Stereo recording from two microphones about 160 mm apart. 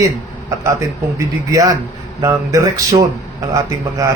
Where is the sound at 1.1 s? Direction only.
20° right (ahead or behind).